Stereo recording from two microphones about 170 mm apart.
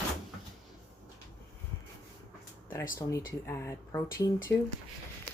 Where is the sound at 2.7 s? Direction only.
15° left (ahead or behind).